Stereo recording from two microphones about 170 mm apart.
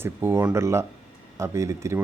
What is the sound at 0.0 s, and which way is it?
Speech, 15° right (ahead or behind).